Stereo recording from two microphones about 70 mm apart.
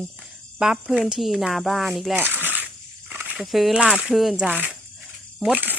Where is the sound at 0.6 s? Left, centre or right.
Centre.